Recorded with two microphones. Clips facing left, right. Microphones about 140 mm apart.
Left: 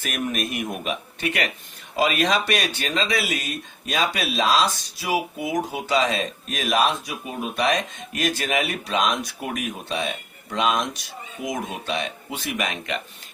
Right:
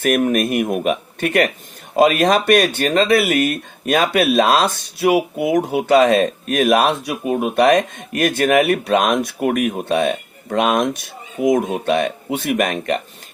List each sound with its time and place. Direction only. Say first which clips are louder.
0.0 s speech: right 11 dB; 55° right (ahead or behind)